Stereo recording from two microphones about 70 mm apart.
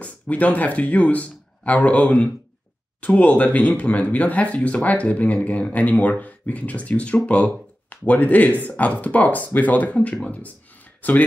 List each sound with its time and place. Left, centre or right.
0.0 s speech: left